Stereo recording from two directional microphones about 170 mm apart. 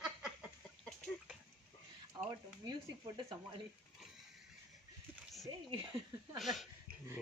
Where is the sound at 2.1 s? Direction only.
25° right (ahead or behind).